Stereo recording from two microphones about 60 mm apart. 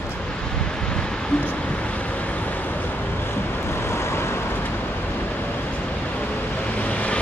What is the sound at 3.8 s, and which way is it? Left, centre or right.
Vehicle, left.